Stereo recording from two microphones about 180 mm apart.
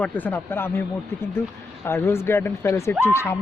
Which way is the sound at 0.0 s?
10° left (ahead or behind).